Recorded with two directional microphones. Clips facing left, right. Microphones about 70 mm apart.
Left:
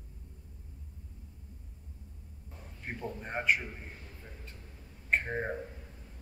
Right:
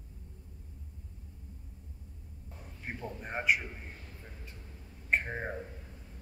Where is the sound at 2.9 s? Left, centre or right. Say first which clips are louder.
Left 1 dB; centre.